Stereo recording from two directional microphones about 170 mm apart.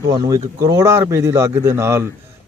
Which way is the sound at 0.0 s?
20° right (ahead or behind).